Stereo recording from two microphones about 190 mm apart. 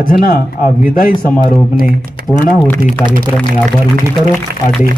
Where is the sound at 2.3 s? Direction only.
5° left (ahead or behind).